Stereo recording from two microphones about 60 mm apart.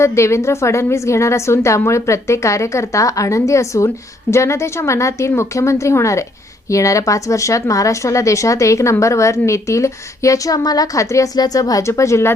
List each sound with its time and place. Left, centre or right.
0.0 s a woman's voice: left
11.8 s a woman's voice: left